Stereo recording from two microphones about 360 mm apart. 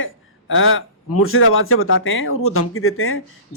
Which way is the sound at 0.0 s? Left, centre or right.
Left.